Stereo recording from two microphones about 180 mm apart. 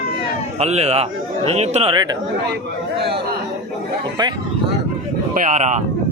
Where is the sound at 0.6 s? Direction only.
35° right (ahead or behind).